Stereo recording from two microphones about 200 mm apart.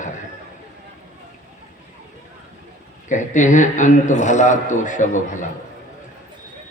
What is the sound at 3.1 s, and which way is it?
A man's voice, 40° left (ahead or behind).